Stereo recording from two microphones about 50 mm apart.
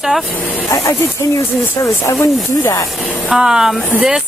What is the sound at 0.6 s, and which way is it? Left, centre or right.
Speech, left.